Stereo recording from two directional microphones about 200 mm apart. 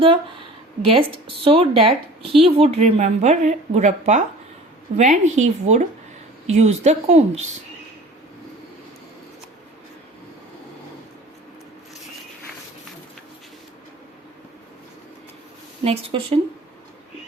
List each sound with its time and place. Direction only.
0.0 s a sound: 25° right (ahead or behind)
0.9 s a woman's voice: 25° right (ahead or behind)
15.8 s a woman's voice: 30° right (ahead or behind)